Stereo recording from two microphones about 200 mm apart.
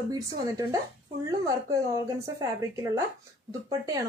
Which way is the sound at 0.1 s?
15° right (ahead or behind).